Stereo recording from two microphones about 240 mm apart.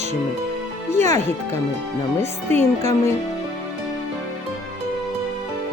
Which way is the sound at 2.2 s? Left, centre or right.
Right.